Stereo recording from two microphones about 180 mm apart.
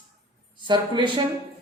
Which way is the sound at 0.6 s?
25° right (ahead or behind).